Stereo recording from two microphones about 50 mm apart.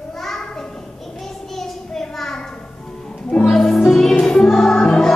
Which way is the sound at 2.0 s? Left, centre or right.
Centre.